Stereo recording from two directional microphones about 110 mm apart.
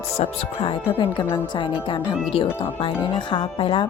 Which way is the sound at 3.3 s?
50° left (ahead or behind).